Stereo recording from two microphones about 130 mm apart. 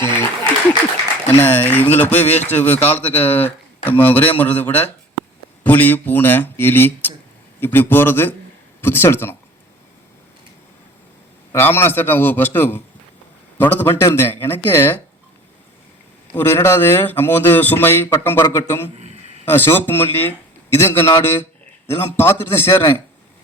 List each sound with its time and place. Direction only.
0.0 s applause: 20° left (ahead or behind)
1.3 s speech: 15° left (ahead or behind)
11.5 s speech: 20° left (ahead or behind)
16.3 s a man's voice: 20° left (ahead or behind)